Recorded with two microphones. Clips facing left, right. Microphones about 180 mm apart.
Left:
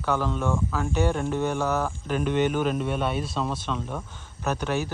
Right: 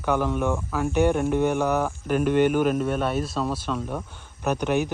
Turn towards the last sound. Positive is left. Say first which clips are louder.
# right 4 dB
turn(degrees=-15)  # may be behind; listen again after turning